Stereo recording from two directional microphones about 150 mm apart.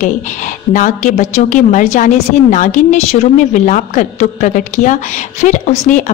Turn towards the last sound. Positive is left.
turn(degrees=55)  # may be behind; listen again after turning